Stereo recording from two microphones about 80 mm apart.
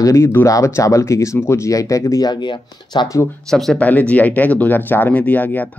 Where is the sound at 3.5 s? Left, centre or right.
Centre.